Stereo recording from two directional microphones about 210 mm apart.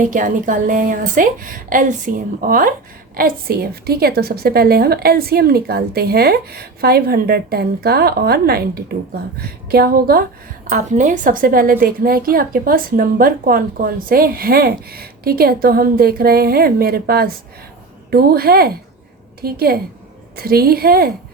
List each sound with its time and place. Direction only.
0.0 s a woman's voice: 40° right (ahead or behind)